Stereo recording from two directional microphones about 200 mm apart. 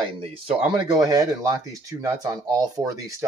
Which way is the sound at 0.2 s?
25° right (ahead or behind).